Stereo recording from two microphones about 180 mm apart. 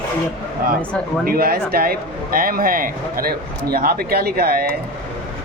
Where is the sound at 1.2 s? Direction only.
55° right (ahead or behind).